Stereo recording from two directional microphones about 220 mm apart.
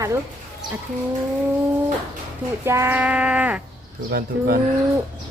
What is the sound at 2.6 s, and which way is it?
Speech, 10° right (ahead or behind).